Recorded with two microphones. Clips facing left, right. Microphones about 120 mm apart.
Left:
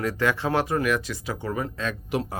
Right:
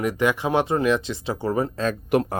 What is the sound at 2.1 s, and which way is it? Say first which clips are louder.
Speech: right 7 dB; 55° right (ahead or behind).